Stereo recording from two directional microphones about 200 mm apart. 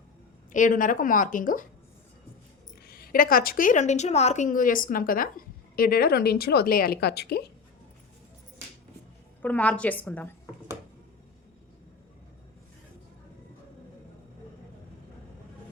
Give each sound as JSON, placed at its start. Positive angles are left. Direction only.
{"t": 0.5, "sound": "a woman's voice", "side_deg": 40}
{"t": 2.8, "sound": "a woman's voice", "side_deg": 50}
{"t": 9.4, "sound": "a woman's voice", "side_deg": 10}